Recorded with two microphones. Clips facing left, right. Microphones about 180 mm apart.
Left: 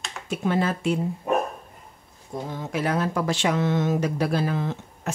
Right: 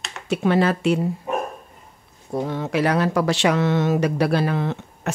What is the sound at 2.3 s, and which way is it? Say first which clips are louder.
Speech: right 6 dB; 70° right (ahead or behind).